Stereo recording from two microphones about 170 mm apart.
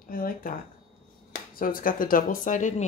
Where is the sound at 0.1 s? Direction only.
55° left (ahead or behind).